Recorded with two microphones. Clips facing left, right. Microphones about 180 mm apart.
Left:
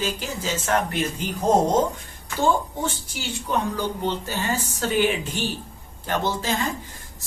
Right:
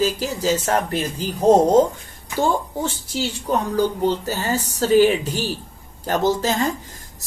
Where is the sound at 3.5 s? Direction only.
40° right (ahead or behind).